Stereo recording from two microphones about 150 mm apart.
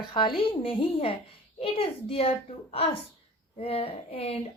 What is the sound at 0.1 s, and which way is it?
A woman's voice, 35° left (ahead or behind).